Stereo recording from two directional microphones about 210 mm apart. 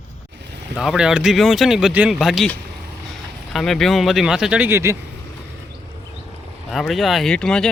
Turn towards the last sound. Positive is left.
turn(degrees=5)  # may be behind; listen again after turning